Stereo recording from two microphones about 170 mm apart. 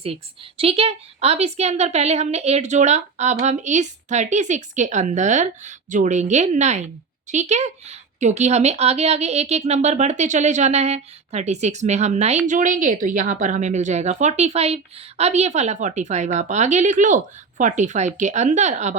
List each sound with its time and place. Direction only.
0.0 s a woman's voice: 35° right (ahead or behind)